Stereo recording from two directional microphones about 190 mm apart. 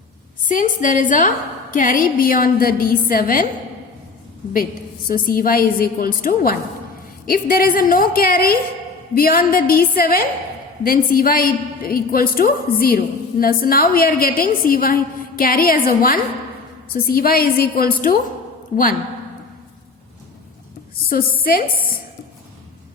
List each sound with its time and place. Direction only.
0.4 s a woman's voice: 45° left (ahead or behind)
5.0 s a woman's voice: 50° left (ahead or behind)
21.1 s a woman's voice: 50° left (ahead or behind)